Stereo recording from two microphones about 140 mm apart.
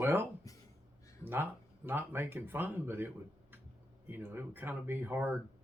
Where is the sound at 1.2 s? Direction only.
15° right (ahead or behind).